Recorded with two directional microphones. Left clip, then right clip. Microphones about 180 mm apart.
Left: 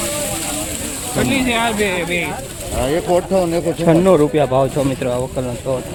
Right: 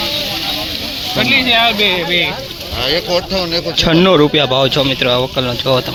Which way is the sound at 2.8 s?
40° left (ahead or behind).